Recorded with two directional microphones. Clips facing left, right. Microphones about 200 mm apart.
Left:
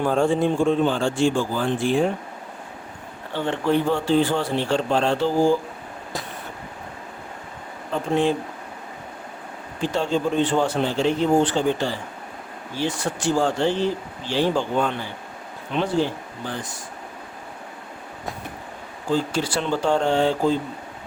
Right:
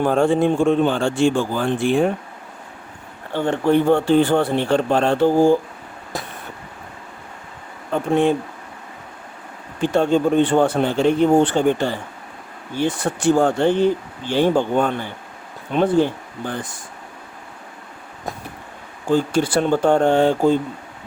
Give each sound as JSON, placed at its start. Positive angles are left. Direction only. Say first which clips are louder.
{"t": 0.0, "sound": "speech", "louder": "right 3 dB", "side_deg": -60}
{"t": 3.3, "sound": "speech", "louder": "right 4 dB", "side_deg": -50}
{"t": 7.9, "sound": "speech", "louder": "right 4 dB", "side_deg": -55}
{"t": 9.8, "sound": "speech", "louder": "right 6 dB", "side_deg": -55}
{"t": 19.1, "sound": "speech", "louder": "right 5 dB", "side_deg": -55}